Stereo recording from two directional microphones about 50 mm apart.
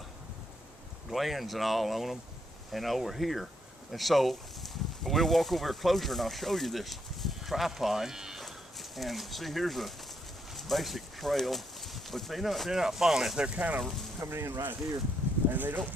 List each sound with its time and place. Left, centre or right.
1.1 s speech: centre
8.4 s speech: centre
13.6 s speech: right
14.3 s speech: right
15.4 s speech: right